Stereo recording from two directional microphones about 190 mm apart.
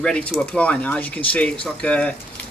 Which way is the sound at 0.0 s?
5° left (ahead or behind).